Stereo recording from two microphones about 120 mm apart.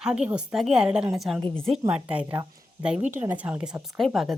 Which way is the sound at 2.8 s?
10° right (ahead or behind).